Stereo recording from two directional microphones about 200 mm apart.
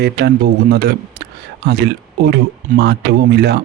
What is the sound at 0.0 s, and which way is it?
A man's voice, 55° right (ahead or behind).